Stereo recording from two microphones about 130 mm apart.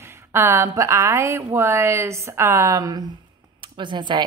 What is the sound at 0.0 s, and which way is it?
A woman's voice, 20° right (ahead or behind).